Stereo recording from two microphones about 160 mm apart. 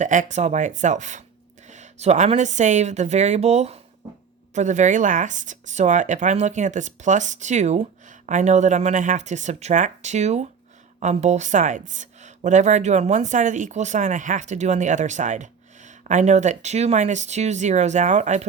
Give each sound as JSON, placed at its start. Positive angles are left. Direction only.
{"t": 0.0, "sound": "a woman's voice", "side_deg": -50}